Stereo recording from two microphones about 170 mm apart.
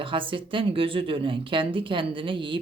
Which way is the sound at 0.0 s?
30° right (ahead or behind).